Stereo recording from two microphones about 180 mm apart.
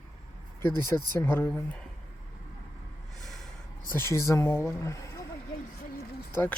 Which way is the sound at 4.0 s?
15° left (ahead or behind).